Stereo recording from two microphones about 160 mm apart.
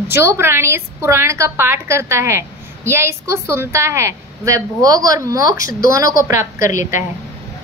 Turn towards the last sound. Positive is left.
turn(degrees=-15)  # may be behind; listen again after turning